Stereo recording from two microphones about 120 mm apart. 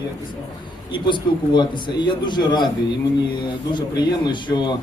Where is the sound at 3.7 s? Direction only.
40° left (ahead or behind).